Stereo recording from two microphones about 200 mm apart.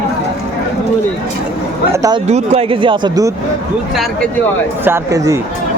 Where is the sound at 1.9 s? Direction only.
15° right (ahead or behind).